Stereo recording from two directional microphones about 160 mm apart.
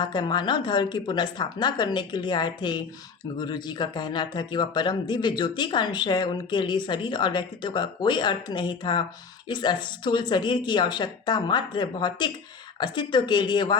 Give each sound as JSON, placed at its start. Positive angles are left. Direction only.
{"t": 0.0, "sound": "speech", "side_deg": 25}